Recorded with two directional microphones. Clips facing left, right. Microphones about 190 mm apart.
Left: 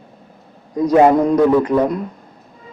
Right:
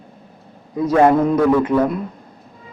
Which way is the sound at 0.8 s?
15° left (ahead or behind).